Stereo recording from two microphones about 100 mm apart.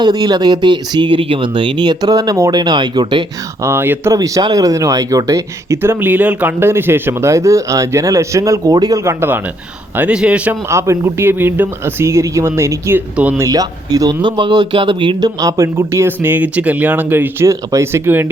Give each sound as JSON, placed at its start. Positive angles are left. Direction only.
{"t": 0.0, "sound": "speech", "side_deg": -40}
{"t": 3.6, "sound": "speech", "side_deg": -25}
{"t": 4.2, "sound": "speech", "side_deg": -40}
{"t": 9.0, "sound": "speech", "side_deg": -20}
{"t": 10.5, "sound": "speech", "side_deg": -30}
{"t": 15.4, "sound": "speech", "side_deg": -35}
{"t": 17.5, "sound": "speech", "side_deg": -30}